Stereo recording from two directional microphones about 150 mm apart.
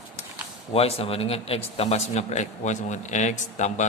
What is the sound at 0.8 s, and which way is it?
A man's voice, 40° left (ahead or behind).